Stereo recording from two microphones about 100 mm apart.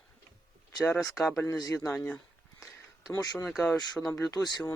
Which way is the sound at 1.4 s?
35° left (ahead or behind).